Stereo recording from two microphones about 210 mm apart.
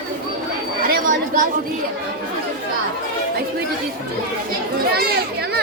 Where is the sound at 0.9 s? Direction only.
40° right (ahead or behind).